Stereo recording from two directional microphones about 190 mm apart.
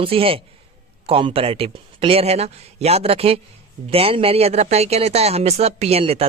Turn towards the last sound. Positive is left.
turn(degrees=-30)  # may be behind; listen again after turning